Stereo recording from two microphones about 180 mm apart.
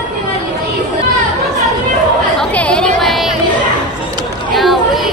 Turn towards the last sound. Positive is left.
turn(degrees=0)  # may be behind; listen again after turning